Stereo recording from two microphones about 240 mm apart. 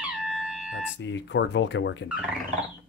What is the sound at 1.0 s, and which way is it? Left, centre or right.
Speech, left.